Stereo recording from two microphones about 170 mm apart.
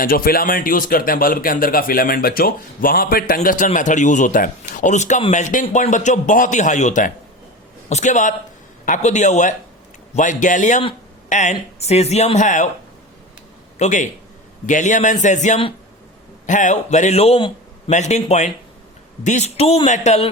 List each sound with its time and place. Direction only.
0.0 s a man's voice: 60° left (ahead or behind)
13.7 s a man's voice: 45° left (ahead or behind)